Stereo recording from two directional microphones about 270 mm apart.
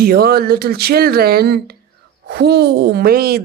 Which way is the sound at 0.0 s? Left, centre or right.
Right.